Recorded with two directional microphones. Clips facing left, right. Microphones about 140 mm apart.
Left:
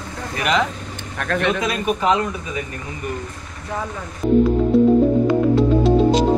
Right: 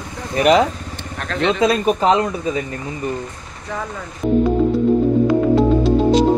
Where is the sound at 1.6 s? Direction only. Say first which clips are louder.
Right 5 dB; 35° right (ahead or behind).